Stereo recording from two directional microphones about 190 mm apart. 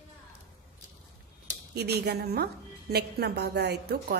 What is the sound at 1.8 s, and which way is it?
A woman's voice, 60° right (ahead or behind).